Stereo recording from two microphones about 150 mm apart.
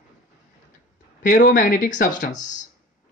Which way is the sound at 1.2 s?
65° left (ahead or behind).